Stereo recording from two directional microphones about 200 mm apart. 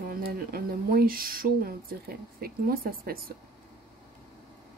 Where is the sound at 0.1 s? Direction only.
50° right (ahead or behind).